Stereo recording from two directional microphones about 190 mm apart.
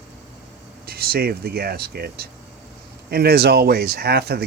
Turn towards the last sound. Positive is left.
turn(degrees=-60)  # may be behind; listen again after turning